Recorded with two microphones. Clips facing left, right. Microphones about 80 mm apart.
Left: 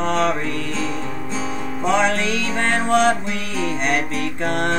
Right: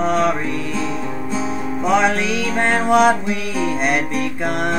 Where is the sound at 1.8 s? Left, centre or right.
Centre.